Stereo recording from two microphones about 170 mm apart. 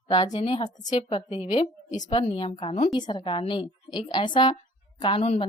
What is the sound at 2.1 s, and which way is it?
A woman's voice, 30° left (ahead or behind).